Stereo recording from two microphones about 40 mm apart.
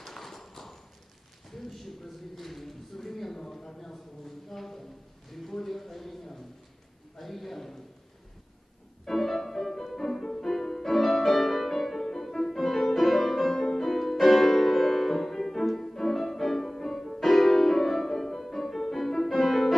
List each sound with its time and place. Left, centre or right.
0.0 s clip-clop: centre
1.5 s a sound: centre
9.0 s music: centre